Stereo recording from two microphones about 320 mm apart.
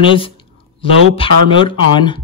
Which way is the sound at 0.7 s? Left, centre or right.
Centre.